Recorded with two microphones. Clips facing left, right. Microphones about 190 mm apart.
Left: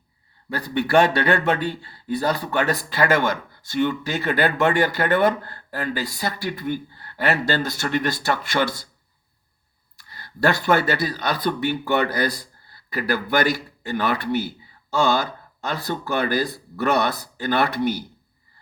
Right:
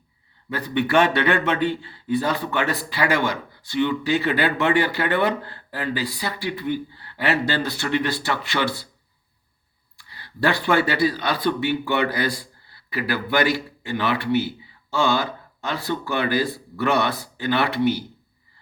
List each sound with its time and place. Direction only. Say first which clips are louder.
0.5 s speech: left 1 dB; 40° left (ahead or behind)
10.0 s speech: left 1 dB; 45° left (ahead or behind)